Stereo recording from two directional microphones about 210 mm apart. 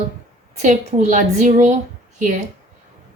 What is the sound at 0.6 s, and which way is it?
Speech, 35° right (ahead or behind).